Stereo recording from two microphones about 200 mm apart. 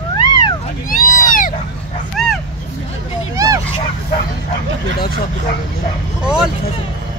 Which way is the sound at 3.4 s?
15° right (ahead or behind).